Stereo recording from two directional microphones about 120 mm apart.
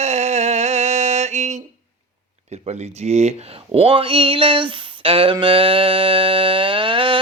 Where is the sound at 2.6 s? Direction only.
65° right (ahead or behind).